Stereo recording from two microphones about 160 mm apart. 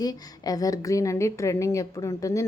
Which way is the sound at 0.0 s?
25° left (ahead or behind).